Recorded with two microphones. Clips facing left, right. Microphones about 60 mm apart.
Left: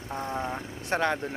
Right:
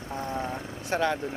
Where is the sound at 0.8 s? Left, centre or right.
Left.